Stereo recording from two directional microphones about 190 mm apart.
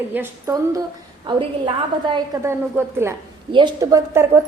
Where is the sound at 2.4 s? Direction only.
15° right (ahead or behind).